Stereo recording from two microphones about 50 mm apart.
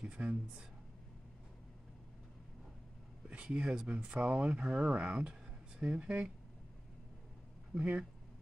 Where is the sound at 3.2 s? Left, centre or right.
Right.